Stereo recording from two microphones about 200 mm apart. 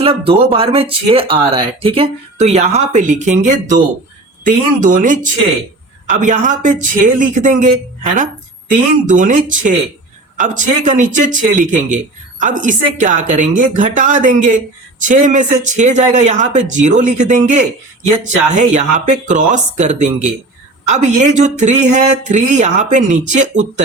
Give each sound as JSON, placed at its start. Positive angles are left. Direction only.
{"t": 0.0, "sound": "speech", "side_deg": -30}